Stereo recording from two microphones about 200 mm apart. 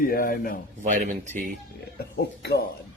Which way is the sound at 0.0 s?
45° left (ahead or behind).